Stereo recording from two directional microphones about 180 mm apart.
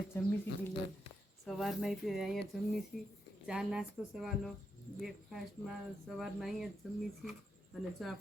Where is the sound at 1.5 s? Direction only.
Centre (ahead or behind).